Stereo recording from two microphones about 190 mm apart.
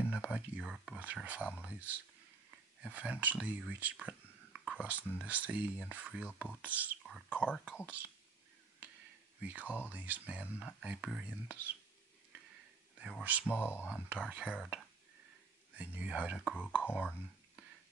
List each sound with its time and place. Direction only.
0.1 s speech: 5° right (ahead or behind)
9.4 s speech: 5° right (ahead or behind)
13.0 s speech: 5° right (ahead or behind)
13.5 s speech: 10° left (ahead or behind)
14.0 s speech: 5° right (ahead or behind)
16.5 s speech: 10° left (ahead or behind)